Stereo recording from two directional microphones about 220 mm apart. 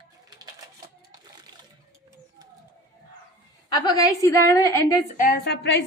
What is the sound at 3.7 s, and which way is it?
A woman's voice, 20° left (ahead or behind).